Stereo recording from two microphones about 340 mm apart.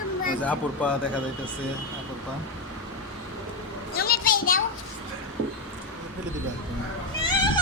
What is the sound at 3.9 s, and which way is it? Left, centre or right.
Children playing, left.